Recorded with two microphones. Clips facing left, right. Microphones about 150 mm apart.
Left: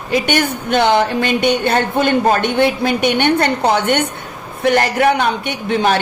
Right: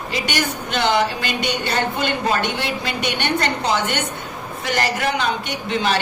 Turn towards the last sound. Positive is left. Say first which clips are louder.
# left 5 dB
turn(degrees=55)  # may be behind; listen again after turning